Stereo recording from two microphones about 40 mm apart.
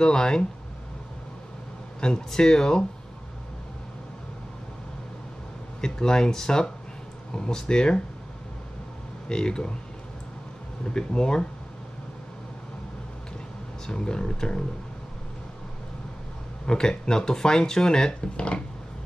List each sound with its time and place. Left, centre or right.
0.0 s speech: centre
2.0 s speech: left
5.8 s speech: centre
9.3 s speech: centre
10.9 s speech: left
13.8 s speech: left
16.6 s speech: left